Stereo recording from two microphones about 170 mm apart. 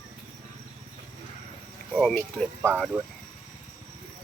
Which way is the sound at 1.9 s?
5° left (ahead or behind).